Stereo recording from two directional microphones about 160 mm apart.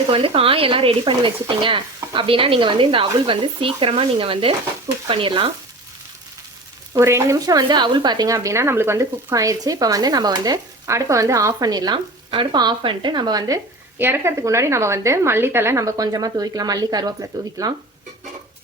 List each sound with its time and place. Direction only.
0.1 s speech: 35° right (ahead or behind)
6.9 s a woman's voice: 15° right (ahead or behind)